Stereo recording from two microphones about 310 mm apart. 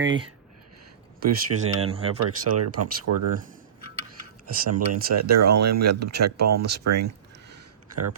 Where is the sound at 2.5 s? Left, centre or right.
Right.